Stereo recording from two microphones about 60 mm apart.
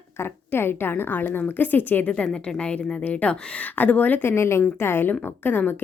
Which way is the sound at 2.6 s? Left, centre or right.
Left.